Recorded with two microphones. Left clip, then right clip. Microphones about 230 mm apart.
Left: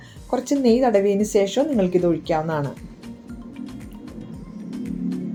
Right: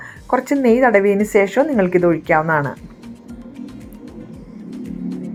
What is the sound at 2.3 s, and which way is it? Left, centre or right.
Speech, centre.